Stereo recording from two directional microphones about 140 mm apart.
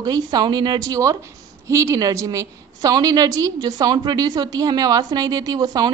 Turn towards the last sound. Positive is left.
turn(degrees=-30)  # may be behind; listen again after turning